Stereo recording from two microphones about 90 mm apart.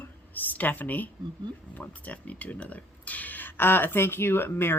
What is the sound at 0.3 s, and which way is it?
Speech, 20° left (ahead or behind).